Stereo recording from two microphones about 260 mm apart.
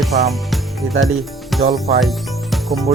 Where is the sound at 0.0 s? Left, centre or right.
Centre.